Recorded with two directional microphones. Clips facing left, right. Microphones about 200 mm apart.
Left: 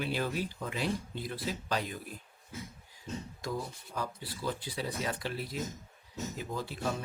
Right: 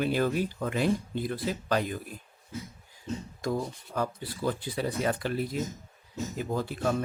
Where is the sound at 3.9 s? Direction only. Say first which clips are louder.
Right 7 dB; 55° right (ahead or behind).